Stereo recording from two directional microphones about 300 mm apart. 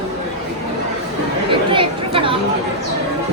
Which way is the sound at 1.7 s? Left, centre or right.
Centre.